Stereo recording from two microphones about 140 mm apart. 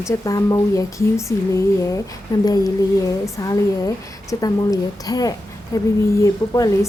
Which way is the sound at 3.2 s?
25° left (ahead or behind).